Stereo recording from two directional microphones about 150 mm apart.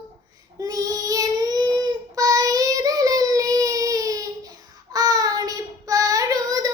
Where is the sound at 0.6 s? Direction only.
25° right (ahead or behind).